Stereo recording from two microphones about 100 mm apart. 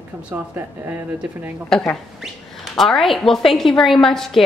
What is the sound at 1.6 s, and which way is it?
A woman's voice, 5° left (ahead or behind).